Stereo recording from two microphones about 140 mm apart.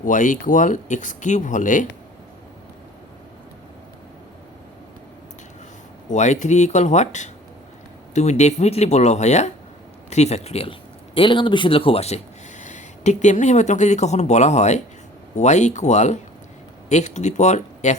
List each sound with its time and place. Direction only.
0.0 s speech: 65° left (ahead or behind)
6.1 s speech: 55° left (ahead or behind)